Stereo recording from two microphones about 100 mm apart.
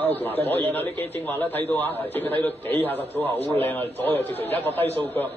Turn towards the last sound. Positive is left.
turn(degrees=20)  # may be behind; listen again after turning